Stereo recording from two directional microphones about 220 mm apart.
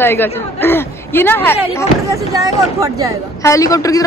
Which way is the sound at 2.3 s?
15° right (ahead or behind).